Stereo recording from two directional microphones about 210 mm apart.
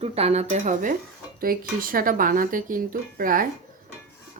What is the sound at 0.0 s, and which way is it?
Speech, 30° right (ahead or behind).